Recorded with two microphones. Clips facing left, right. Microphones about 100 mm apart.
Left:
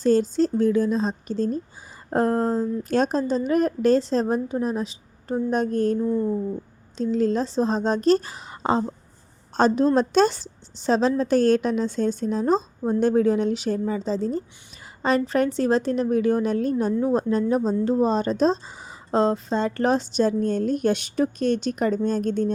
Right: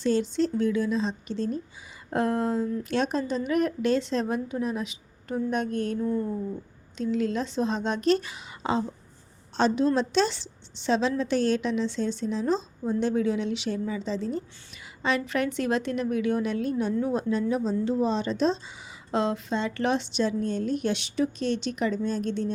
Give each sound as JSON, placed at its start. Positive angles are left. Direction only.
{"t": 0.0, "sound": "a woman's voice", "side_deg": 40}
{"t": 6.0, "sound": "speech", "side_deg": 20}
{"t": 6.9, "sound": "a woman's voice", "side_deg": 35}